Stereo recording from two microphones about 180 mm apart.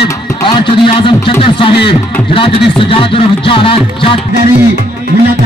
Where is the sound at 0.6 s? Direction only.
30° left (ahead or behind).